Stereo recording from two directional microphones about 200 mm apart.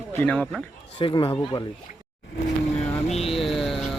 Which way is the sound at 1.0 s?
25° left (ahead or behind).